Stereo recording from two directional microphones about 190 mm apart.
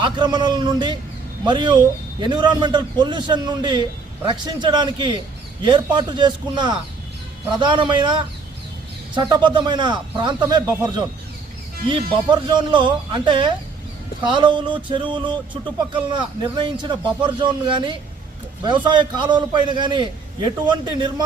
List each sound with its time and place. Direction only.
0.0 s a man's voice: 25° right (ahead or behind)
11.9 s a man's voice: 25° right (ahead or behind)